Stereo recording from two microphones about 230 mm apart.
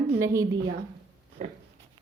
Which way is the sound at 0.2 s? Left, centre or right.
Centre.